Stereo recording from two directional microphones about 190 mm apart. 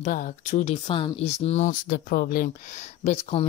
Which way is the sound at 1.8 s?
55° left (ahead or behind).